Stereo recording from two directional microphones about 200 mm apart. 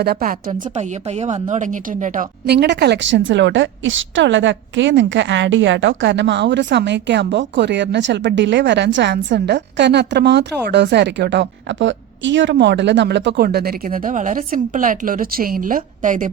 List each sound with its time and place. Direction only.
0.0 s a woman's voice: 50° right (ahead or behind)
2.5 s a woman's voice: 55° right (ahead or behind)